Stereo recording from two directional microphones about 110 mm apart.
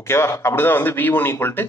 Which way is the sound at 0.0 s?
25° left (ahead or behind).